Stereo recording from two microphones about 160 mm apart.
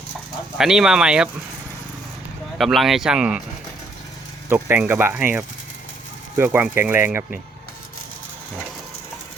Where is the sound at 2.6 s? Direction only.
Centre (ahead or behind).